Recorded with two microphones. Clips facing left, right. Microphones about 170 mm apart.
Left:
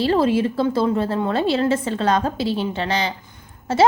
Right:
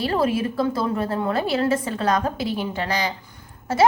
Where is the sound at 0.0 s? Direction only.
30° left (ahead or behind).